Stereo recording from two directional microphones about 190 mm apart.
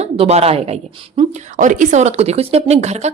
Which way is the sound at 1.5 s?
40° right (ahead or behind).